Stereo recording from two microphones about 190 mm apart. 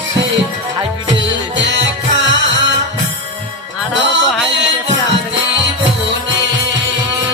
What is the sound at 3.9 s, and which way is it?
Music, 70° right (ahead or behind).